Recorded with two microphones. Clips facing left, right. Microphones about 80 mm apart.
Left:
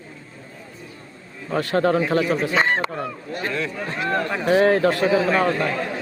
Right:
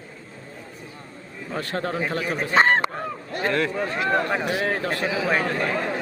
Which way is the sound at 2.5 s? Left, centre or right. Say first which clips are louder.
Right 5 dB; right.